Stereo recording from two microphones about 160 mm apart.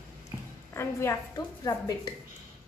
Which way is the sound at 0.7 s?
15° left (ahead or behind).